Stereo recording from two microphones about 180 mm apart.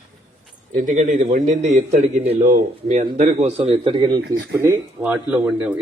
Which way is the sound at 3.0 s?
30° right (ahead or behind).